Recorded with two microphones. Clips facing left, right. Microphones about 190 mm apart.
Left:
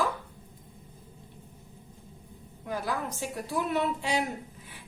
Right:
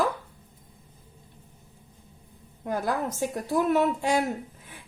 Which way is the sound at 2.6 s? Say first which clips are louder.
Right 5 dB; 50° right (ahead or behind).